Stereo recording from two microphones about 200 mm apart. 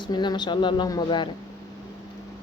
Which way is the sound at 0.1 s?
20° left (ahead or behind).